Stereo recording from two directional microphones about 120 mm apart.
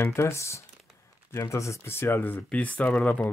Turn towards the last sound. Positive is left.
turn(degrees=15)  # may be behind; listen again after turning